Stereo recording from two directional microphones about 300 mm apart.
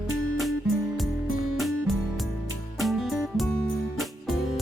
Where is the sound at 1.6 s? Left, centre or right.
Centre.